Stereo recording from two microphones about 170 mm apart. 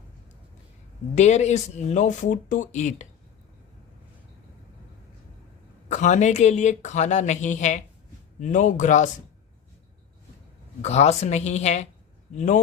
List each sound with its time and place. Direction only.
1.1 s speech: 40° left (ahead or behind)
5.9 s speech: 45° left (ahead or behind)
10.8 s a woman's voice: 40° left (ahead or behind)